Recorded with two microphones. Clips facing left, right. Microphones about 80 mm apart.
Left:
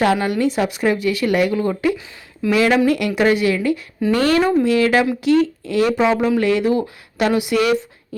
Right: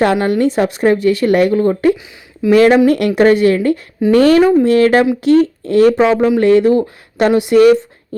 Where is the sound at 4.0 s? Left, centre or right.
Centre.